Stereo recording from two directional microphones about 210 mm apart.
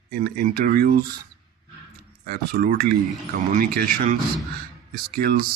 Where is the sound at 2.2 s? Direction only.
45° right (ahead or behind).